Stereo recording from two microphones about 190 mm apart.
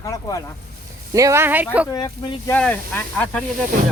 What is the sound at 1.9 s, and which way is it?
Speech, 20° left (ahead or behind).